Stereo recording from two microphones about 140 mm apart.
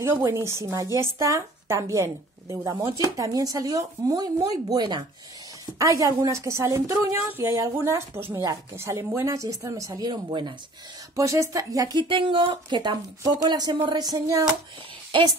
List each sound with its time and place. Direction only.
0.0 s a woman's voice: 20° right (ahead or behind)